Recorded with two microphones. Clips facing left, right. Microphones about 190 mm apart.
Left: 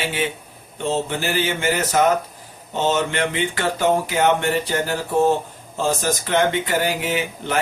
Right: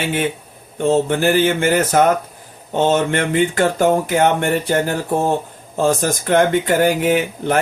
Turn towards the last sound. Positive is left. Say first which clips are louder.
# right 6 dB
turn(degrees=-50)  # may be behind; listen again after turning